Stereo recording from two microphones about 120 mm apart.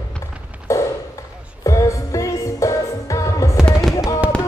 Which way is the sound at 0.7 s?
25° left (ahead or behind).